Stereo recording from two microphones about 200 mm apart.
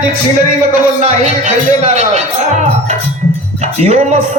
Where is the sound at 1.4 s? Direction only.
35° right (ahead or behind).